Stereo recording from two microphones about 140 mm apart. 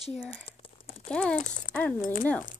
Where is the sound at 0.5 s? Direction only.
40° left (ahead or behind).